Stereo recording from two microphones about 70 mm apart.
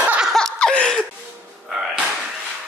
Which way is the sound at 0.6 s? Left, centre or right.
Centre.